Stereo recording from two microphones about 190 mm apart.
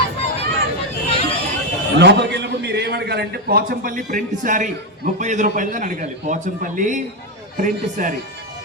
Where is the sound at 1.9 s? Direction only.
65° right (ahead or behind); by 8.1 s 45° right (ahead or behind).